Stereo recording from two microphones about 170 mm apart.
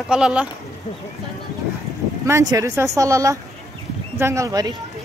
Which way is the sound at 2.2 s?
20° right (ahead or behind).